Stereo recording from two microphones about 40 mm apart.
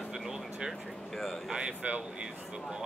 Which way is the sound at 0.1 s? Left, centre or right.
Centre.